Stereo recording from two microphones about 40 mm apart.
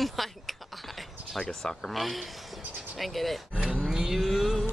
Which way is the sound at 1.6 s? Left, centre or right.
Centre.